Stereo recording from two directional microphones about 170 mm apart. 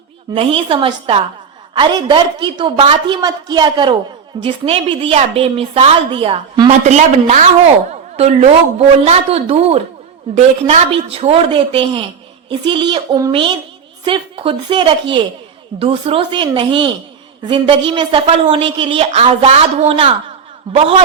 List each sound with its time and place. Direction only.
0.3 s a woman's voice: 30° right (ahead or behind)
6.7 s a woman's voice: 45° right (ahead or behind)